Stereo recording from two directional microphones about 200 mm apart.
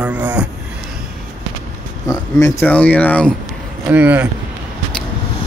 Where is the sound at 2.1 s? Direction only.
15° left (ahead or behind).